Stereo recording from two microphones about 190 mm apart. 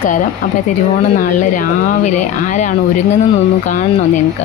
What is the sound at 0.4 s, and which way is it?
Speech, 45° left (ahead or behind).